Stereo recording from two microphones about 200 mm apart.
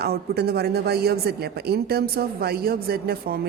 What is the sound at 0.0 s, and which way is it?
Speech, 50° right (ahead or behind).